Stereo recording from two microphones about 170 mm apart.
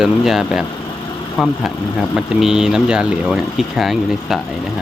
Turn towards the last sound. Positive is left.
turn(degrees=0)  # may be behind; listen again after turning